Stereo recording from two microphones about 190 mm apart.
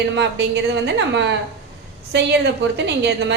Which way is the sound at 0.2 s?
60° right (ahead or behind).